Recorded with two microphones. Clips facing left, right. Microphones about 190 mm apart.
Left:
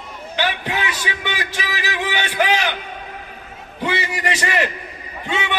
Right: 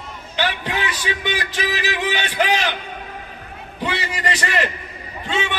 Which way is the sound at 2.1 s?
15° left (ahead or behind).